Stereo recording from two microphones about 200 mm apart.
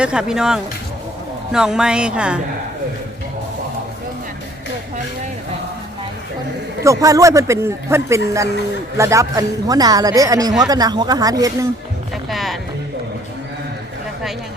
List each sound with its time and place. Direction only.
0.0 s speech: 5° right (ahead or behind)
7.0 s a man's voice: 15° right (ahead or behind)
12.3 s music: centre (ahead or behind)